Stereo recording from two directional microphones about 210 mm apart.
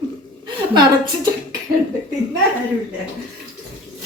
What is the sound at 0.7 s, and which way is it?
Speech, 20° right (ahead or behind).